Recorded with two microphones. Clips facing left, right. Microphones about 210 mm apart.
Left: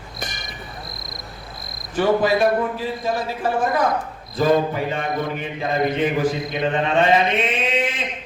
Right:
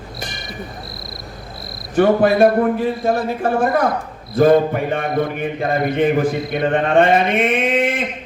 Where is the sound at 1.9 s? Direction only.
55° right (ahead or behind).